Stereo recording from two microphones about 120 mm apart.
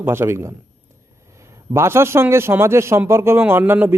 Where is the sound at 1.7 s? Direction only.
20° right (ahead or behind).